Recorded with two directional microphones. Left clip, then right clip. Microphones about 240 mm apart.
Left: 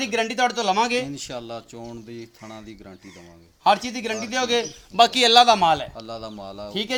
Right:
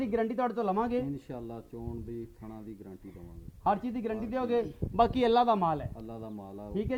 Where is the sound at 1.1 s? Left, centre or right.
Centre.